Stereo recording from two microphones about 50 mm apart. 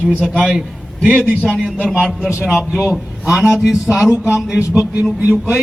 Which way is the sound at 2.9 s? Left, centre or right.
Centre.